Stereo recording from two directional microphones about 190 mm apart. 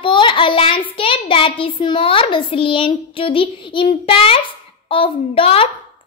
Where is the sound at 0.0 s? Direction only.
25° left (ahead or behind).